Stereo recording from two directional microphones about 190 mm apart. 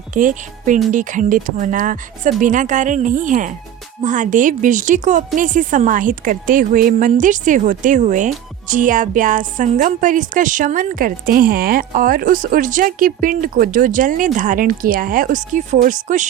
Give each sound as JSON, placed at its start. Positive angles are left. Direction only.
{"t": 0.1, "sound": "speech", "side_deg": -45}